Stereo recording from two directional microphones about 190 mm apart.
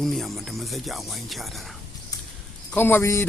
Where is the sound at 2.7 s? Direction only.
10° left (ahead or behind).